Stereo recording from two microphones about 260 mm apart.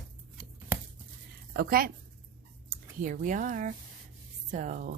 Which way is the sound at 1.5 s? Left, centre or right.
Right.